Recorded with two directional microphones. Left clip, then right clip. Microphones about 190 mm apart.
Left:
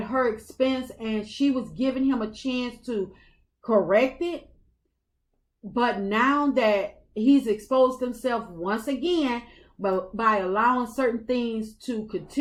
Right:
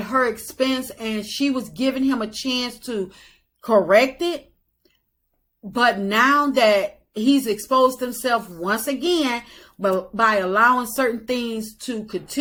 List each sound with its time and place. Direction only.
0.1 s speech: 20° right (ahead or behind)
5.7 s speech: 20° right (ahead or behind)